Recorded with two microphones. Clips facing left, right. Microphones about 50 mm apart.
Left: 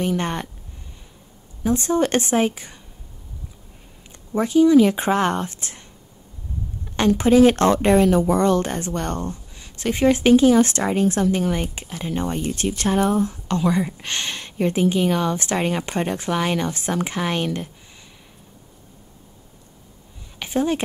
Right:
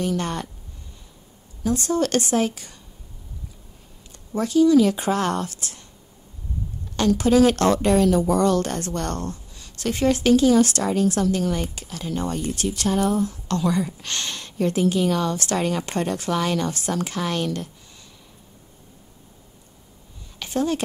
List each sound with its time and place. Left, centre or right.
0.0 s speech: left
1.6 s speech: left
4.3 s speech: left
7.0 s speech: left
20.3 s a sound: centre